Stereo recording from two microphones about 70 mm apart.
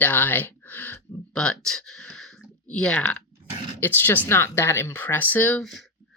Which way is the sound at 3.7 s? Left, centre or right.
Left.